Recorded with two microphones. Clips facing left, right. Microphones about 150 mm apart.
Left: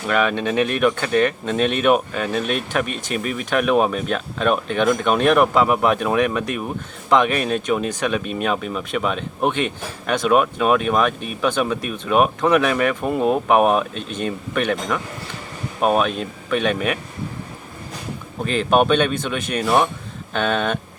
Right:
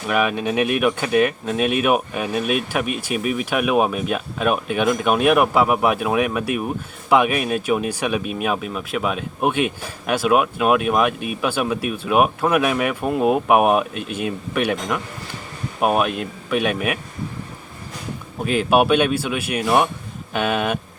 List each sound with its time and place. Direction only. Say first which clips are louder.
0.1 s speech: left 1 dB; 10° right (ahead or behind)
18.4 s speech: even; 10° right (ahead or behind)